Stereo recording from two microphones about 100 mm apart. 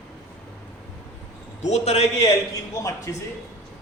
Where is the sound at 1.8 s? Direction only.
90° left.